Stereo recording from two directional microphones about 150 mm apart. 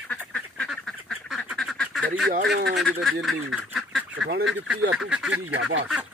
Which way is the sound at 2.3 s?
90° right.